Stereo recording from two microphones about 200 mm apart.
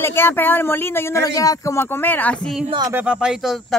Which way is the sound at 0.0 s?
10° left (ahead or behind).